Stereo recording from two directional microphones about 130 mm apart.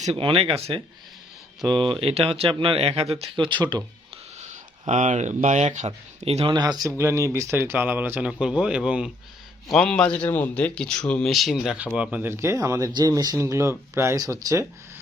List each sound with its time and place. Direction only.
0.0 s speech: 50° right (ahead or behind); by 3.8 s 35° right (ahead or behind)
4.9 s speech: 70° right (ahead or behind); by 6.5 s 50° right (ahead or behind)
6.5 s speech: 35° right (ahead or behind)